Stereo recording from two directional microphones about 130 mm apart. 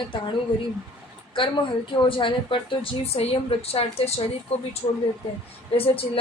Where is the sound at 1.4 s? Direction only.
40° left (ahead or behind).